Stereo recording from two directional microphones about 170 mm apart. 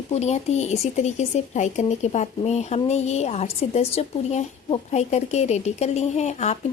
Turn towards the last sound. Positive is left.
turn(degrees=40)  # may be behind; listen again after turning